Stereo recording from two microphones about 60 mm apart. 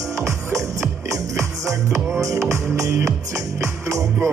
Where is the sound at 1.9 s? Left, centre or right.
Right.